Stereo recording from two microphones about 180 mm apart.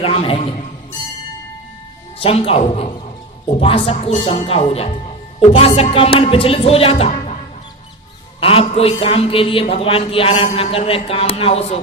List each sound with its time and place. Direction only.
0.0 s speech: 30° left (ahead or behind)
2.1 s speech: 30° left (ahead or behind)
8.4 s speech: 30° left (ahead or behind)